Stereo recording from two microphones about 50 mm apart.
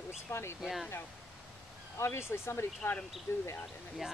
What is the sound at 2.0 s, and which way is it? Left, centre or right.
Speech, left.